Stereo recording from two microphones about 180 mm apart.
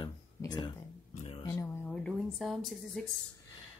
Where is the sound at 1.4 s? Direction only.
15° left (ahead or behind).